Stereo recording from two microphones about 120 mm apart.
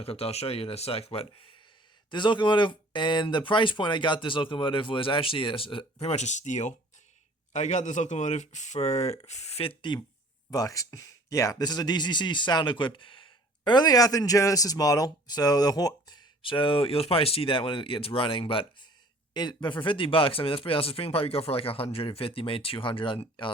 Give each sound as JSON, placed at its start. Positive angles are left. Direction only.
{"t": 0.0, "sound": "speech", "side_deg": 55}
{"t": 10.5, "sound": "speech", "side_deg": 30}
{"t": 19.3, "sound": "speech", "side_deg": 35}